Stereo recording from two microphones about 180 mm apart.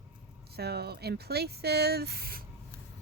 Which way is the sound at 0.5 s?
65° right (ahead or behind).